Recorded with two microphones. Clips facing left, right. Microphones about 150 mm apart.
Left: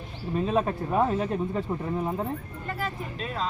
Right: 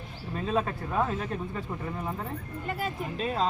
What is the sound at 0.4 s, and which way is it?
Speech, 15° left (ahead or behind).